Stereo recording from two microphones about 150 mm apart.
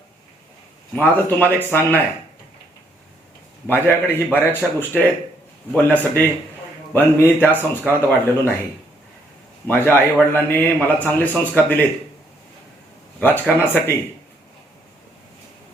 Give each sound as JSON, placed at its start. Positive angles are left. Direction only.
{"t": 0.9, "sound": "a man's voice", "side_deg": 10}
{"t": 3.7, "sound": "a man's voice", "side_deg": 15}
{"t": 9.6, "sound": "a man's voice", "side_deg": 15}
{"t": 13.1, "sound": "a man's voice", "side_deg": 10}